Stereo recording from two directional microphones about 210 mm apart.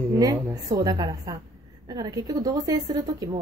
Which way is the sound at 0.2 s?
20° right (ahead or behind).